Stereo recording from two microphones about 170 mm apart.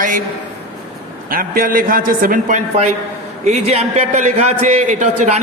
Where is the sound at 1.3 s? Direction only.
55° right (ahead or behind).